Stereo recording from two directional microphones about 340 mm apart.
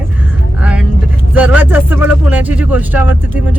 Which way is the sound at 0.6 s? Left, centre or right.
Centre.